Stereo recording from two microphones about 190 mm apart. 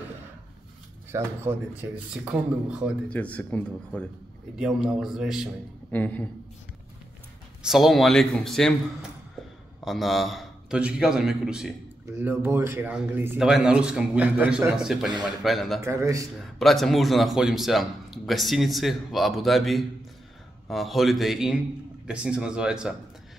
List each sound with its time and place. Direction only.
1.1 s speech: 10° right (ahead or behind)
3.1 s speech: 5° left (ahead or behind)
4.6 s a man's voice: 5° right (ahead or behind)
5.9 s a woman's voice: 10° left (ahead or behind)
7.6 s a man's voice: centre (ahead or behind)
9.8 s a man's voice: centre (ahead or behind)
15.8 s speech: 15° right (ahead or behind)
16.5 s a man's voice: centre (ahead or behind)